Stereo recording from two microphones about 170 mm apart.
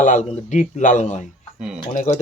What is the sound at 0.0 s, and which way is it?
A man's voice, 45° left (ahead or behind).